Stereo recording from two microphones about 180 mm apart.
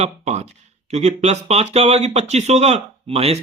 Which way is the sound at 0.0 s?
40° right (ahead or behind).